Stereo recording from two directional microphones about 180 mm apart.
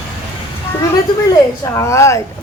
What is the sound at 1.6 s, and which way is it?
Speech, 15° left (ahead or behind).